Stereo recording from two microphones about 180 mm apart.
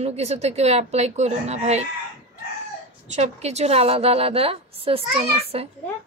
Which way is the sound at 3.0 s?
40° right (ahead or behind).